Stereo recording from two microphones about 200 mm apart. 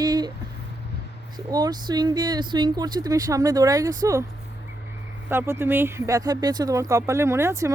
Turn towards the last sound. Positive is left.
turn(degrees=-15)  # may be behind; listen again after turning